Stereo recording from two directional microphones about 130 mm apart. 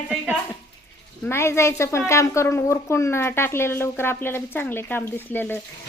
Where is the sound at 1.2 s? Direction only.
20° left (ahead or behind).